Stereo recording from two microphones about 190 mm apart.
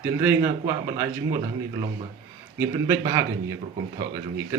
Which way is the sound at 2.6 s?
15° right (ahead or behind).